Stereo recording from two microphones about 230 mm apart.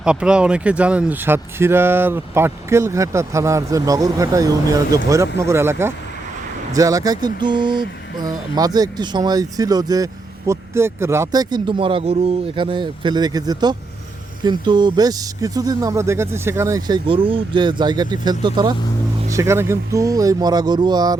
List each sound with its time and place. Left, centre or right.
0.0 s speech: centre
7.4 s a sound: centre
8.5 s speech: centre